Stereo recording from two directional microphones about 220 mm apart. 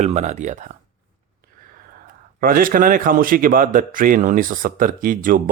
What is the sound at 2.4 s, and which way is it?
A man's voice, 40° right (ahead or behind).